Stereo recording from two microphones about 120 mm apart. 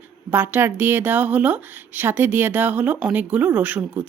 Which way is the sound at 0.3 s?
15° right (ahead or behind).